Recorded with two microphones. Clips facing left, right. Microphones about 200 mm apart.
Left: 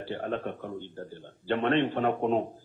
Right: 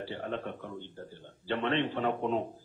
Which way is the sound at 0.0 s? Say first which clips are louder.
Left 4 dB; 55° left (ahead or behind).